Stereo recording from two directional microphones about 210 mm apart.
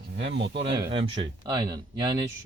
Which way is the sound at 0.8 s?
20° right (ahead or behind).